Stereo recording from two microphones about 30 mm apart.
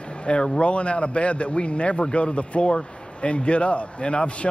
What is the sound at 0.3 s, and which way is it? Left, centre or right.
Speech, left.